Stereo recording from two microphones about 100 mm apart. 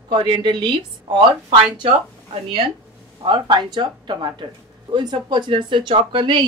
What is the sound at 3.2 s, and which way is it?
A woman's voice, 50° right (ahead or behind).